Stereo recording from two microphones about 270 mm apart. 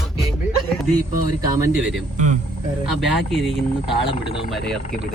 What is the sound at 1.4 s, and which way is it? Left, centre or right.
Speech, centre.